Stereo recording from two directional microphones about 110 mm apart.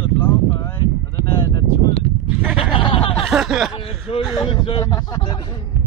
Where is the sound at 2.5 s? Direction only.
55° left (ahead or behind).